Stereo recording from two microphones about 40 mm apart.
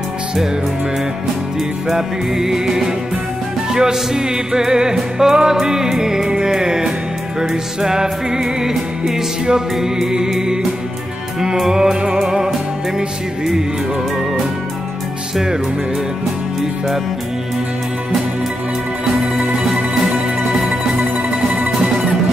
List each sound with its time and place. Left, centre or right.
1.9 s music: centre
11.7 s music: centre
20.4 s music: centre